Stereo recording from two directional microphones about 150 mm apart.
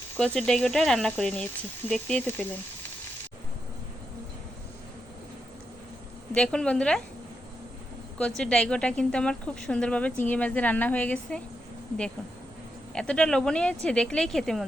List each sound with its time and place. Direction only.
0.2 s speech: 5° left (ahead or behind)
6.3 s speech: 5° left (ahead or behind)
8.2 s speech: 5° left (ahead or behind)
12.9 s speech: 5° left (ahead or behind)